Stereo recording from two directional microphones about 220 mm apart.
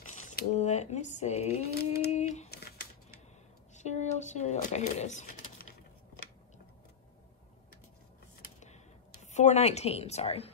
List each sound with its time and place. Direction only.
0.1 s speech: 35° left (ahead or behind)
2.0 s a sound: 30° left (ahead or behind)
3.7 s speech: 30° left (ahead or behind)
9.2 s a woman's voice: 30° left (ahead or behind)